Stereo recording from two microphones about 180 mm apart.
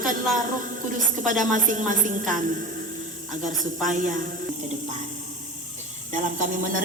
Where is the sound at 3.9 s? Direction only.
45° right (ahead or behind).